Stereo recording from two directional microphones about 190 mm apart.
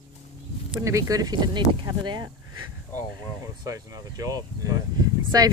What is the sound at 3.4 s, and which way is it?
Speech, 20° right (ahead or behind).